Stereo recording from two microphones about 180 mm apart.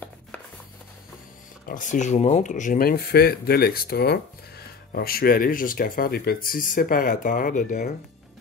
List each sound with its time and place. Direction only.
1.7 s speech: 45° left (ahead or behind)